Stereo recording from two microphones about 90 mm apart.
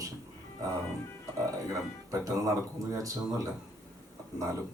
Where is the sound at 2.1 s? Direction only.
40° right (ahead or behind).